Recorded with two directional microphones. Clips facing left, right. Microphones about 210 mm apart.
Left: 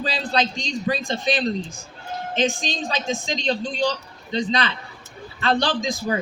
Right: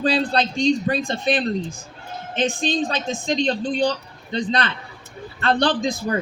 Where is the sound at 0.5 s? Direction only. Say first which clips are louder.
Right 6 dB; 55° right (ahead or behind).